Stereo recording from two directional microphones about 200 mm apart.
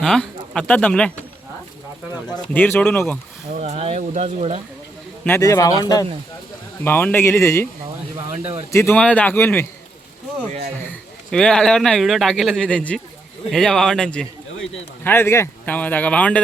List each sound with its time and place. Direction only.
0.0 s speech: 5° left (ahead or behind)
2.5 s speech: 10° left (ahead or behind)
3.5 s speech: 35° right (ahead or behind)
5.4 s speech: 15° left (ahead or behind)
8.7 s speech: 10° left (ahead or behind)
11.3 s speech: 5° left (ahead or behind)